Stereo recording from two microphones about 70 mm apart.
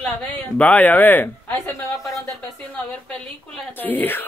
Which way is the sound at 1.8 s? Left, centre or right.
Left.